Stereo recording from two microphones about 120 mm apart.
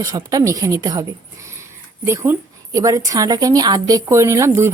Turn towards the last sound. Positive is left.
turn(degrees=-20)  # may be behind; listen again after turning